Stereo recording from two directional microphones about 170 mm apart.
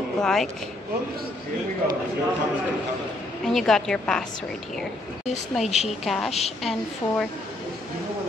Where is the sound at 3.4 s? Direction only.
Centre (ahead or behind).